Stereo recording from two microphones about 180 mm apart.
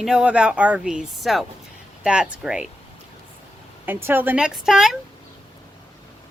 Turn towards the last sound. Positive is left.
turn(degrees=-5)  # may be behind; listen again after turning